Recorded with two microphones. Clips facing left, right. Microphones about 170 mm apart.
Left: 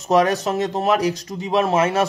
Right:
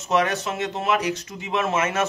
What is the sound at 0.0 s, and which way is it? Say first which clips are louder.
Speech: left 5 dB; 40° left (ahead or behind).